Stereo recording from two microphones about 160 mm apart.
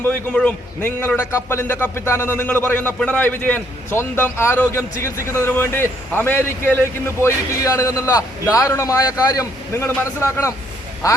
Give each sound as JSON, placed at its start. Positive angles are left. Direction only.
{"t": 0.0, "sound": "a man's voice", "side_deg": 10}
{"t": 11.0, "sound": "a man's voice", "side_deg": 20}